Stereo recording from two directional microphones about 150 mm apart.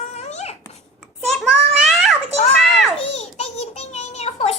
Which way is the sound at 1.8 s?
Centre (ahead or behind).